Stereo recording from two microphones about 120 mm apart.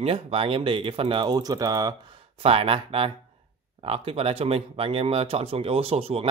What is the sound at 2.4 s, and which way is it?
Speech, 50° right (ahead or behind).